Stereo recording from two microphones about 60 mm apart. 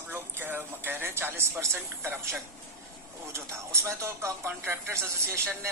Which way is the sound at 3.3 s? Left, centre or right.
Right.